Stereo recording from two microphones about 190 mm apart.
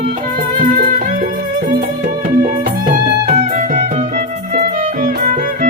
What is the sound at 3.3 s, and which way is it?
Music, 40° right (ahead or behind).